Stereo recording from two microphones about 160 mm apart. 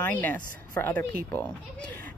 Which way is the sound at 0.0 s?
10° left (ahead or behind).